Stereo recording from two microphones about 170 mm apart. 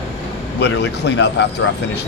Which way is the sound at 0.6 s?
90° left.